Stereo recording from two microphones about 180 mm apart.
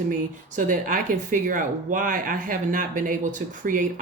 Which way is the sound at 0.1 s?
45° right (ahead or behind).